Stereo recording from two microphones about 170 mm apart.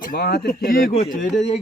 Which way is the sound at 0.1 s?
70° left (ahead or behind).